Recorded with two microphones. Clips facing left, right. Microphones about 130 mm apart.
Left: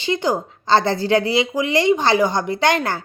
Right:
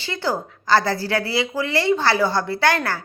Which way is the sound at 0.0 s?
20° left (ahead or behind).